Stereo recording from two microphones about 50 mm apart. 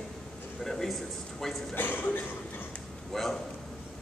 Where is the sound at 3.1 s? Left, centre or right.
Centre.